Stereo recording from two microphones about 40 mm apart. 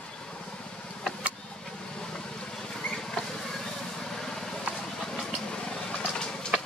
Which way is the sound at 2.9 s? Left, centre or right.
Centre.